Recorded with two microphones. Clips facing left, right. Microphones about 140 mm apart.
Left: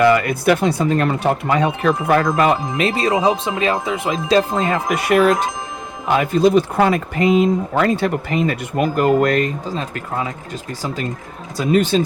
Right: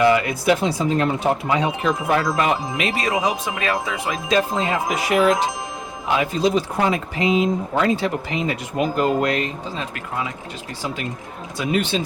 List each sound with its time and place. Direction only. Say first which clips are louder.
0.0 s speech: left 3 dB; 50° left (ahead or behind); by 4.4 s 30° left (ahead or behind)
4.5 s speech: left 3 dB; 50° left (ahead or behind)
11.5 s speech: left 6 dB; 40° left (ahead or behind)